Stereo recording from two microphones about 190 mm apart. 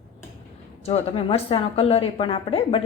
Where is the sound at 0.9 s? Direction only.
30° left (ahead or behind).